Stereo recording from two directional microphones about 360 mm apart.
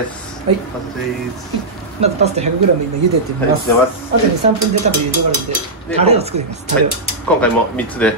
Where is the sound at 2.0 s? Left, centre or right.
Centre.